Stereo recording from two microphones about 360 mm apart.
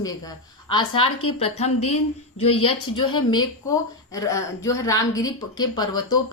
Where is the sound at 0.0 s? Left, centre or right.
Centre.